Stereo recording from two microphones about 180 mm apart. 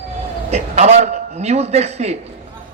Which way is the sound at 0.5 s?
40° right (ahead or behind).